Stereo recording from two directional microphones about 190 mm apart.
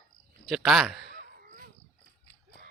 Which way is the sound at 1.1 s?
50° right (ahead or behind).